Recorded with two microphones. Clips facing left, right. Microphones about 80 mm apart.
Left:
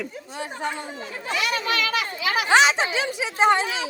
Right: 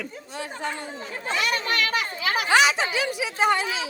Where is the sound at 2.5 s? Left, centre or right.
Left.